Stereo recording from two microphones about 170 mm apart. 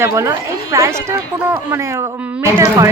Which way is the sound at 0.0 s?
15° right (ahead or behind).